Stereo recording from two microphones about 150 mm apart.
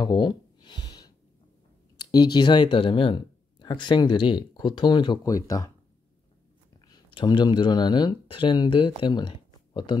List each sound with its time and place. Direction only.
0.0 s a sound: 30° left (ahead or behind)
2.0 s speech: 30° left (ahead or behind)
6.9 s speech: 30° left (ahead or behind)